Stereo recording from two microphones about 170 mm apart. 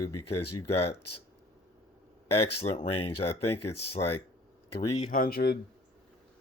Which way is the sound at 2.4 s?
35° left (ahead or behind).